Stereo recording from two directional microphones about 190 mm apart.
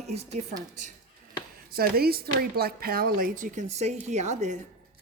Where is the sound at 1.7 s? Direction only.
55° right (ahead or behind).